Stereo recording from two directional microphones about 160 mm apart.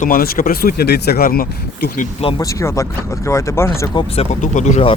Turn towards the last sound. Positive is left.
turn(degrees=45)  # may be behind; listen again after turning